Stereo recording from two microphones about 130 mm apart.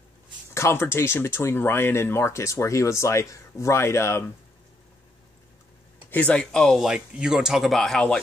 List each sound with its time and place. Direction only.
0.6 s speech: 20° left (ahead or behind)
6.0 s speech: 10° left (ahead or behind)